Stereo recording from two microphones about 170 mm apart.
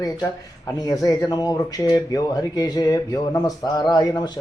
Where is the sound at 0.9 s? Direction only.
20° left (ahead or behind).